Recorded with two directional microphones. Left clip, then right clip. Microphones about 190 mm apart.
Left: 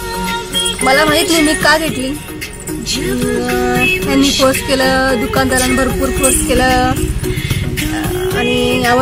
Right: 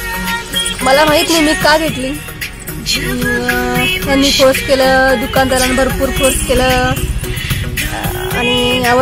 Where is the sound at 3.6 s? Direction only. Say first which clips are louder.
Left 1 dB; centre (ahead or behind).